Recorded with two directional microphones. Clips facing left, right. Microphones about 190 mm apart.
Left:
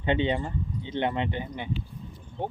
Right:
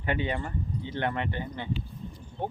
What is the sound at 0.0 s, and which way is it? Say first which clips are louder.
Speech: left 4 dB; 25° left (ahead or behind).